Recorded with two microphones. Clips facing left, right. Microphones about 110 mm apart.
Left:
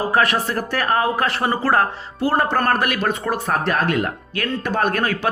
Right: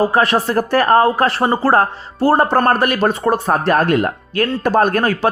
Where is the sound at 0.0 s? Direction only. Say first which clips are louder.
Right 4 dB; 30° right (ahead or behind).